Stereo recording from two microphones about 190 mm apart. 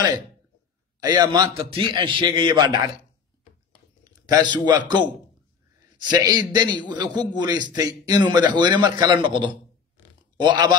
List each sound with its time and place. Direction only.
1.0 s a man's voice: 20° right (ahead or behind)
4.0 s a man's voice: 20° right (ahead or behind)
6.0 s a man's voice: 20° right (ahead or behind)